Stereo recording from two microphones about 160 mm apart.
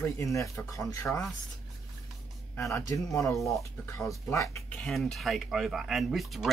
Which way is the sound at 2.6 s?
20° left (ahead or behind).